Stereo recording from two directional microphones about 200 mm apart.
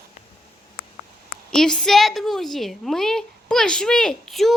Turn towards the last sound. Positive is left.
turn(degrees=0)  # may be behind; listen again after turning